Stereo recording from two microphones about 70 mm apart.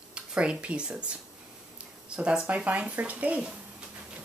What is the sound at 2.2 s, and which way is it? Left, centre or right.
Speech, centre.